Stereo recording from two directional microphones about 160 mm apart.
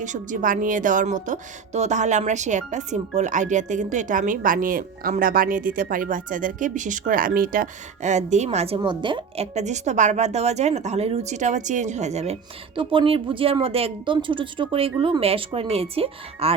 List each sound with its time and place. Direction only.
0.0 s a woman's voice: 50° right (ahead or behind)